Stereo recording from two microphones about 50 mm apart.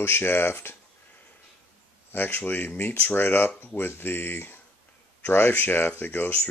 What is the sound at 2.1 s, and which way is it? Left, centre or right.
Speech, left.